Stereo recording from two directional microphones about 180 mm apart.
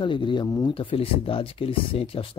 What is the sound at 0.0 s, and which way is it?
Speech, 25° left (ahead or behind).